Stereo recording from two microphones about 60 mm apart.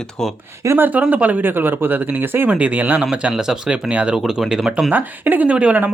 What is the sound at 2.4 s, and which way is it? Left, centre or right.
Speech, right.